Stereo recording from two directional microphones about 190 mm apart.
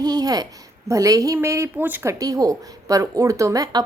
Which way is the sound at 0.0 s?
20° right (ahead or behind).